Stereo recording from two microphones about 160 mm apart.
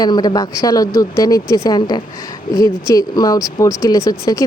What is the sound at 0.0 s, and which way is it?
Speech, 25° left (ahead or behind).